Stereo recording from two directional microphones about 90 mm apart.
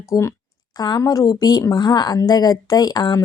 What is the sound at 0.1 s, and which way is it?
Speech, 30° left (ahead or behind).